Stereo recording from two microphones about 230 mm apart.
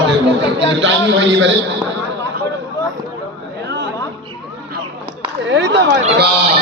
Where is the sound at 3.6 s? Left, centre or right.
Right.